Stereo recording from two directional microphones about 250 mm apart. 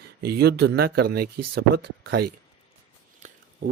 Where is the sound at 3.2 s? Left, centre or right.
Right.